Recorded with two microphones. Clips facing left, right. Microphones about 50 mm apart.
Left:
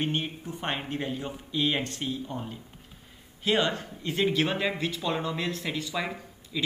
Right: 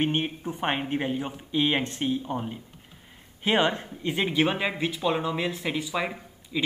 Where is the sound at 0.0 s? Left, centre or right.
Right.